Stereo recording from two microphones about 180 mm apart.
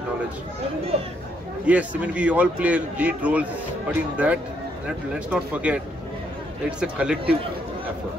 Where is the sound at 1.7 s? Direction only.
10° right (ahead or behind).